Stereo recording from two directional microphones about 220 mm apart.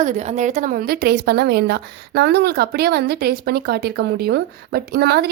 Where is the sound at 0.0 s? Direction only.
30° right (ahead or behind).